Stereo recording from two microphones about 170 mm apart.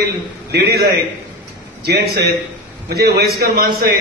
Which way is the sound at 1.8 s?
70° right (ahead or behind).